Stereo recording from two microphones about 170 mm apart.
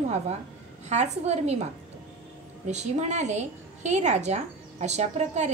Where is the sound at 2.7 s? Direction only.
40° right (ahead or behind).